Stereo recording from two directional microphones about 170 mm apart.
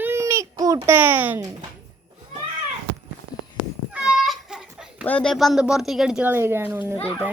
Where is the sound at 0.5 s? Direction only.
20° right (ahead or behind).